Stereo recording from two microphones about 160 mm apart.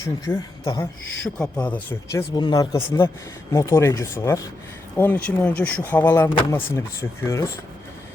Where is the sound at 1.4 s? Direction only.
10° left (ahead or behind).